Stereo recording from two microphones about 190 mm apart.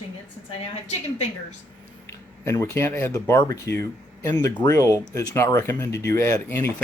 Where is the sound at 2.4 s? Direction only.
15° left (ahead or behind).